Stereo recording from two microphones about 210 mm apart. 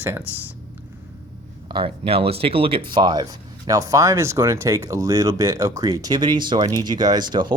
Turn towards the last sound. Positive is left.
turn(degrees=-20)  # may be behind; listen again after turning